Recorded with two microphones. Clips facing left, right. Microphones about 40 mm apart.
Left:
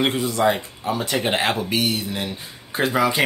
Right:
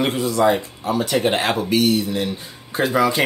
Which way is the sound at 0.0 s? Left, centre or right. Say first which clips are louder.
Right 2 dB; centre.